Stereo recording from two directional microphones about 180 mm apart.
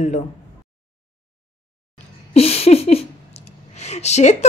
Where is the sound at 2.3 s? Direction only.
35° left (ahead or behind).